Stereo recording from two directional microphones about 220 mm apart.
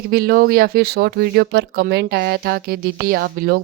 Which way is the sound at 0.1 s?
45° right (ahead or behind).